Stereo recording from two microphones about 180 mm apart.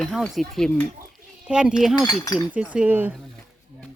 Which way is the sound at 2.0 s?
20° left (ahead or behind).